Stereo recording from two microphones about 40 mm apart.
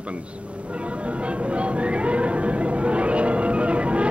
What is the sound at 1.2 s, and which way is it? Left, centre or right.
Music, right.